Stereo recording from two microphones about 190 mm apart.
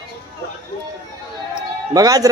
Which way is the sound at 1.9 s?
20° right (ahead or behind).